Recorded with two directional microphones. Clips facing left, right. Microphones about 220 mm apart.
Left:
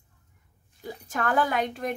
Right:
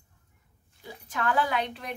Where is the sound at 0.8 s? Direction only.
45° left (ahead or behind).